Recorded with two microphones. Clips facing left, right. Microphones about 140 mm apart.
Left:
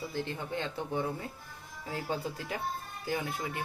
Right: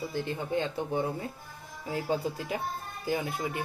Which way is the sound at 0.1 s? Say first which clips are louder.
Right 4 dB; 15° right (ahead or behind).